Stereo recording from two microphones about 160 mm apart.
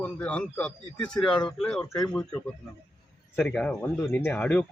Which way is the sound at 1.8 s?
25° left (ahead or behind).